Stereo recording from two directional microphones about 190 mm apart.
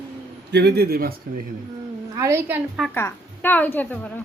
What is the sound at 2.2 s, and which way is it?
Speech, 15° right (ahead or behind).